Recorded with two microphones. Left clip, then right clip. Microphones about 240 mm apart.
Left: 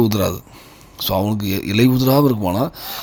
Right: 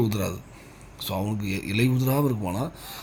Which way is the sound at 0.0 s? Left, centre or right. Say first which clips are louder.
Left 10 dB; left.